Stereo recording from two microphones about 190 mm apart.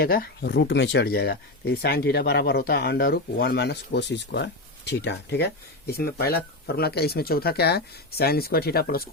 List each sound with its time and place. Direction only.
0.0 s speech: 55° left (ahead or behind)